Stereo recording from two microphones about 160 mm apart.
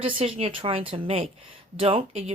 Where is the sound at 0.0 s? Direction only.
35° right (ahead or behind).